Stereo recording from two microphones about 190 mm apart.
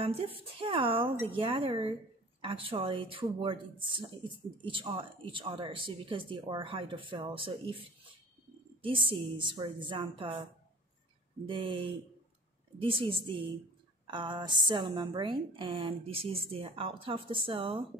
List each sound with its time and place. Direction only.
0.0 s speech: 30° right (ahead or behind)
8.8 s speech: 25° right (ahead or behind)
11.4 s speech: 25° right (ahead or behind)